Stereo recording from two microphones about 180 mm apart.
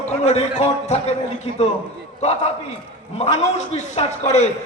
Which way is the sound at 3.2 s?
40° left (ahead or behind).